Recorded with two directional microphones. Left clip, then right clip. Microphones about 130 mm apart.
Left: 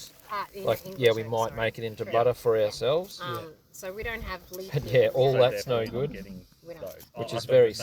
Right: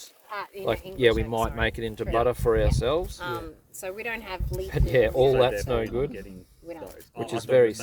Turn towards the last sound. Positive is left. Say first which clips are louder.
# even
turn(degrees=-40)  # may be behind; listen again after turning